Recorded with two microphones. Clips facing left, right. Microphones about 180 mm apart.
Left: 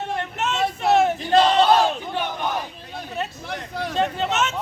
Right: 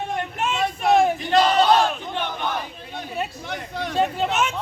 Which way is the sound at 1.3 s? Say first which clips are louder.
Left 3 dB; 25° left (ahead or behind).